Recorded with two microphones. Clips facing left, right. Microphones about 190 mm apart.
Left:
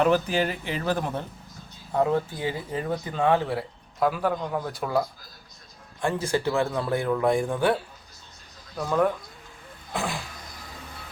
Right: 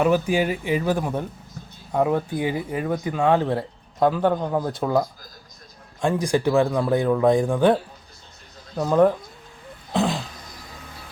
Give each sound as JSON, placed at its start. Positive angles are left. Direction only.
{"t": 0.0, "sound": "speech", "side_deg": -10}
{"t": 4.2, "sound": "speech", "side_deg": -30}
{"t": 8.9, "sound": "speech", "side_deg": -35}
{"t": 9.9, "sound": "speech", "side_deg": -20}